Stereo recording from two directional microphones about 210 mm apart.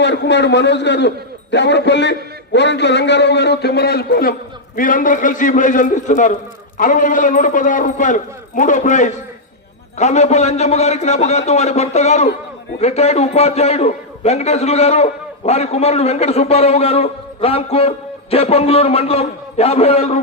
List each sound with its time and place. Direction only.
0.0 s a man's voice: 55° left (ahead or behind); by 20.1 s 30° left (ahead or behind)